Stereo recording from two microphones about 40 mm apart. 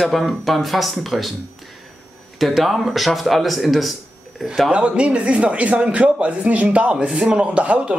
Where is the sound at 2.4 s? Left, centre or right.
Centre.